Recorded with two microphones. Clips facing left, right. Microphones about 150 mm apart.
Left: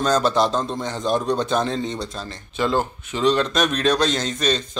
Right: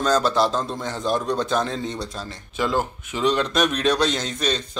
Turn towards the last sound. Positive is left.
turn(degrees=-10)  # may be behind; listen again after turning